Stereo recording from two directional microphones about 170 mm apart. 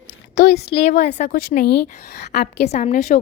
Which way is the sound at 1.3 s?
65° left (ahead or behind).